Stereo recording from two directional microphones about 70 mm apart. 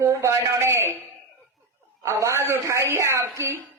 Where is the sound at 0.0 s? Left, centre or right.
Right.